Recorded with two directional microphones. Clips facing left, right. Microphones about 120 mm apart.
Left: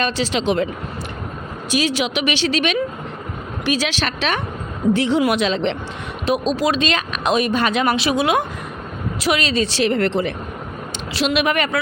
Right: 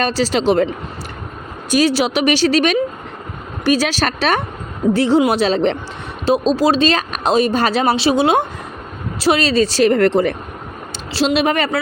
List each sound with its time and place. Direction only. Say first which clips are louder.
0.0 s speech: right 4 dB; 40° right (ahead or behind)
1.7 s speech: right 5 dB; 40° right (ahead or behind)
11.1 s speech: right 3 dB; 30° right (ahead or behind)